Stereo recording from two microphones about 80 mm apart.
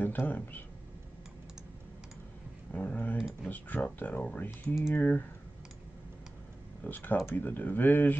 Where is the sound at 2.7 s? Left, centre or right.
Left.